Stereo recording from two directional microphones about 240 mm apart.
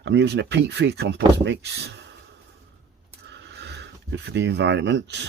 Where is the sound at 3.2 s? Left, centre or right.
Right.